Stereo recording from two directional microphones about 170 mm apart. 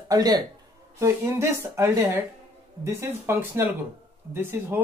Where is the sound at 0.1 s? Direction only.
20° right (ahead or behind).